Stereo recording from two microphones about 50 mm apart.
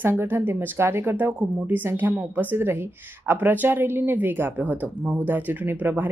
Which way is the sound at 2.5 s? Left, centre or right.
Right.